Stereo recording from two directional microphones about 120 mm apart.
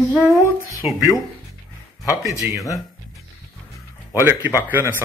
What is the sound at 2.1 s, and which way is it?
Speech, 25° right (ahead or behind).